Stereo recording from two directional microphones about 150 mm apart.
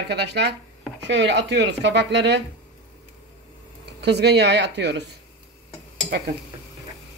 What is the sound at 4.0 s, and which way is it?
Speech, 90° right.